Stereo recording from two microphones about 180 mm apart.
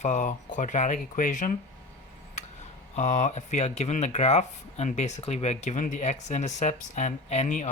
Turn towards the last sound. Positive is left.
turn(degrees=40)  # may be behind; listen again after turning